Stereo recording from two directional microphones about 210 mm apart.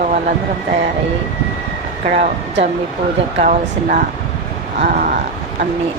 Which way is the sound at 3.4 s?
40° right (ahead or behind).